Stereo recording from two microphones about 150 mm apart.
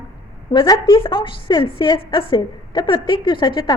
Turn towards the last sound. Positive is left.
turn(degrees=30)  # may be behind; listen again after turning